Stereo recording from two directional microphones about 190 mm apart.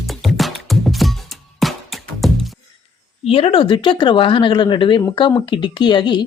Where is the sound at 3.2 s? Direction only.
30° left (ahead or behind).